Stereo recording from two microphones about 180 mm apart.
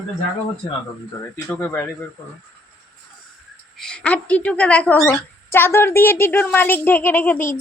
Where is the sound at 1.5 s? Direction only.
10° left (ahead or behind).